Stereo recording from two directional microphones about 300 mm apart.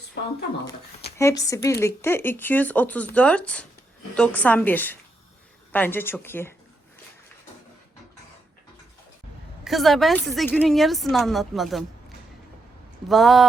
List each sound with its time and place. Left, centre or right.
0.2 s speech: left
1.2 s speech: centre
9.6 s speech: centre